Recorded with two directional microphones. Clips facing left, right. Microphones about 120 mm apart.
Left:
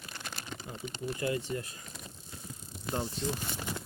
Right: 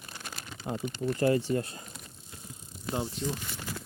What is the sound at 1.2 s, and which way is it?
Speech, 35° right (ahead or behind).